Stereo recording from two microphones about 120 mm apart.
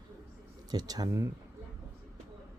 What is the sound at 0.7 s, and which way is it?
Speech, 35° right (ahead or behind).